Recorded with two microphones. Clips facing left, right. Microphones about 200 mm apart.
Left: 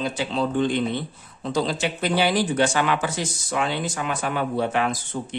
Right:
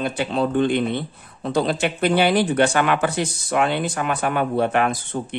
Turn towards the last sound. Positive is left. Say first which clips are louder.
# right 3 dB
turn(degrees=-60)  # may be behind; listen again after turning